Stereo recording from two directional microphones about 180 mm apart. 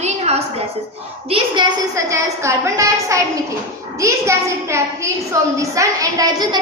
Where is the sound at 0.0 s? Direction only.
35° right (ahead or behind).